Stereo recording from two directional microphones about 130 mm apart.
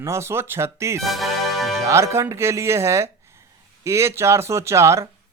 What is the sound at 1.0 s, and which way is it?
Music, centre (ahead or behind).